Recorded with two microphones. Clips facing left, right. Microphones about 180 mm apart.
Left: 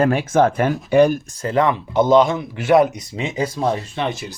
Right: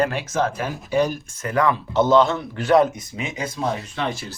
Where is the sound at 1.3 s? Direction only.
30° left (ahead or behind); by 2.9 s 15° left (ahead or behind).